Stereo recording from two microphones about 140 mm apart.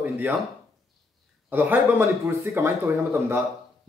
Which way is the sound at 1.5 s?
15° right (ahead or behind).